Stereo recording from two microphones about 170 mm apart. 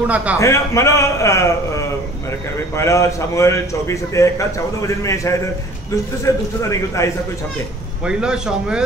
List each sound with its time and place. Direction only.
0.0 s a man's voice: 10° right (ahead or behind)
0.4 s a man's voice: 20° left (ahead or behind)
2.7 s a man's voice: 15° left (ahead or behind)
8.0 s a man's voice: 5° right (ahead or behind)